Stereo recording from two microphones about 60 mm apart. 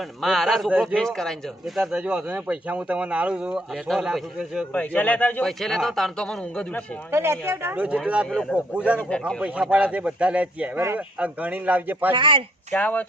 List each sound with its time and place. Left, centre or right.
0.0 s a man's voice: centre
1.6 s a man's voice: centre
1.9 s speech: centre
3.7 s a man's voice: centre
4.7 s a man's voice: left
5.4 s a man's voice: centre
7.1 s speech: right
7.8 s speech: right
9.0 s speech: centre
9.4 s speech: right
12.7 s a man's voice: left